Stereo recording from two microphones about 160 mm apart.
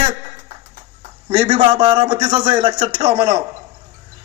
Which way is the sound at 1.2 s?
35° right (ahead or behind).